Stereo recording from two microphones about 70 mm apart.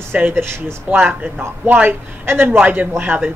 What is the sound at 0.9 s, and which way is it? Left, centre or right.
A man's voice, right.